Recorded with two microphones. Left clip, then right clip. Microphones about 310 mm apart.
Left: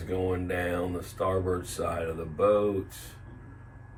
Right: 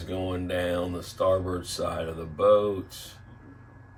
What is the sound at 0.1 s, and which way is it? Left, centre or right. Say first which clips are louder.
Speech: left 1 dB; centre.